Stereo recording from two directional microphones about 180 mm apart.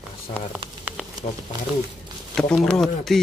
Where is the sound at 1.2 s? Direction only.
40° left (ahead or behind).